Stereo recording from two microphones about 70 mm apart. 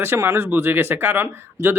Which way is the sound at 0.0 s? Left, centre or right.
Right.